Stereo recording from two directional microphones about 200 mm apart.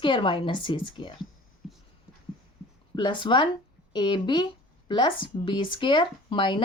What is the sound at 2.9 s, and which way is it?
Speech, 25° left (ahead or behind).